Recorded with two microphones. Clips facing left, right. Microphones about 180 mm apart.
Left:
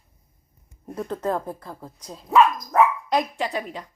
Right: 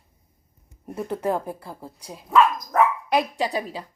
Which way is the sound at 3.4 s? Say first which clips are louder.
Right 2 dB; 35° right (ahead or behind).